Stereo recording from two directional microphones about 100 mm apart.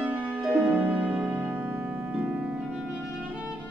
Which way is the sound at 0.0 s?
15° right (ahead or behind).